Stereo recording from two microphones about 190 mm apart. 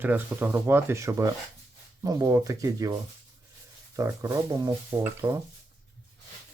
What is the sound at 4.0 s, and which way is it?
Speech, 15° right (ahead or behind).